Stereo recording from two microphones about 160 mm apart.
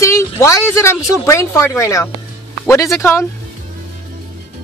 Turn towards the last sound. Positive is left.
turn(degrees=15)  # may be behind; listen again after turning